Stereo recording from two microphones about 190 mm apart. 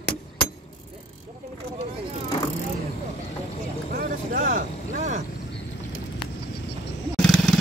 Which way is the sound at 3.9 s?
45° right (ahead or behind).